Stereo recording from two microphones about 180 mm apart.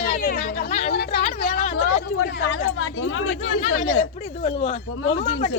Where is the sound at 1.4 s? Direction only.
45° left (ahead or behind).